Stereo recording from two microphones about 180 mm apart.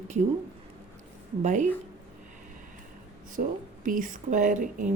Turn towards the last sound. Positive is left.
turn(degrees=-45)  # may be behind; listen again after turning